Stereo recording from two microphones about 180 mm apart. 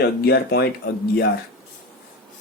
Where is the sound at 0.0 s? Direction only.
65° left (ahead or behind).